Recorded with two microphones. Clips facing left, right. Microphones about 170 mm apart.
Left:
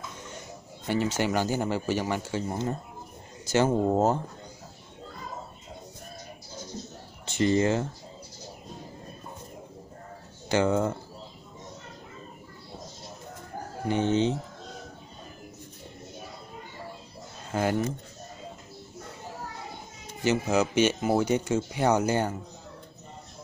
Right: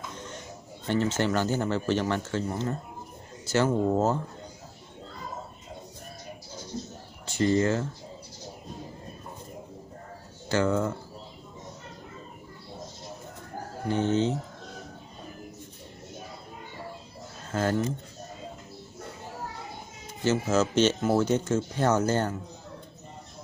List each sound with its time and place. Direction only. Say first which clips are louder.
0.8 s speech: right 1 dB; 10° left (ahead or behind)
7.2 s speech: even; 20° left (ahead or behind)
10.5 s speech: left 1 dB; 20° left (ahead or behind)
13.8 s speech: left 1 dB; 15° left (ahead or behind)
17.5 s speech: even; 15° left (ahead or behind)
20.2 s speech: even; 15° left (ahead or behind)